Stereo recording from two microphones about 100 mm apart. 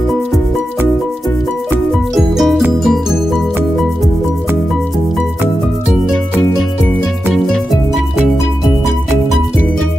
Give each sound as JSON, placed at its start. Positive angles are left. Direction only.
{"t": 2.1, "sound": "music", "side_deg": 0}